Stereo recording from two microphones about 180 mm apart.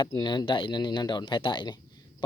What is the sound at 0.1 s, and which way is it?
Speech, 25° left (ahead or behind).